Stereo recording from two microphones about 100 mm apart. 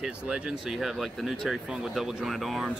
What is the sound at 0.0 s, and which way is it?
Speech, 5° right (ahead or behind).